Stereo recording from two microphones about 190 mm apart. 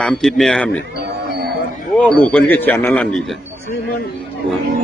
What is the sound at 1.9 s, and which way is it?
Speech, 5° left (ahead or behind).